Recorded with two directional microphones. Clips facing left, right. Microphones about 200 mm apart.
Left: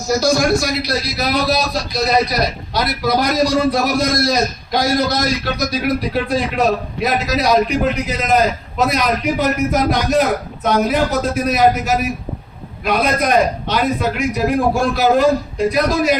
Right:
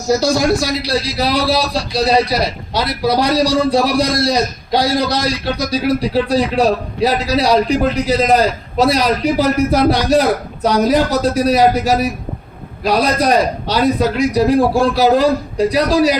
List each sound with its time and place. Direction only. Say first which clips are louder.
0.2 s a man's voice: right 1 dB; 30° right (ahead or behind)